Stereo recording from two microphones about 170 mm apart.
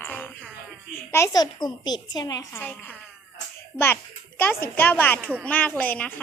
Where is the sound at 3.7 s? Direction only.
15° left (ahead or behind).